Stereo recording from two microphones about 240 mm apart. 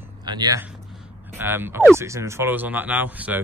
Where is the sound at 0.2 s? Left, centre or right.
Centre.